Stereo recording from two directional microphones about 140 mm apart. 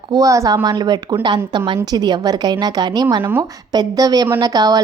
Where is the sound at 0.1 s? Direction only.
25° right (ahead or behind).